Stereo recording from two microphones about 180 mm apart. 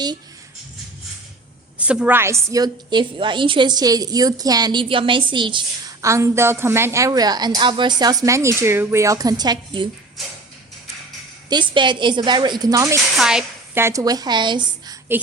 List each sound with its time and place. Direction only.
1.8 s a woman's voice: 5° right (ahead or behind); by 6.1 s 25° right (ahead or behind)
6.1 s a woman's voice: 15° right (ahead or behind)
11.7 s a woman's voice: 25° right (ahead or behind)
13.1 s a woman's voice: 5° right (ahead or behind)
13.8 s a woman's voice: 20° right (ahead or behind)